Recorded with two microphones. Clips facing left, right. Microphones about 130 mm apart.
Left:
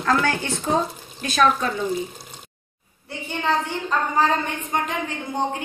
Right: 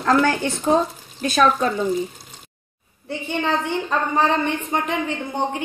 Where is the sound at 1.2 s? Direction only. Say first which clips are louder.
Right 2 dB; 35° right (ahead or behind).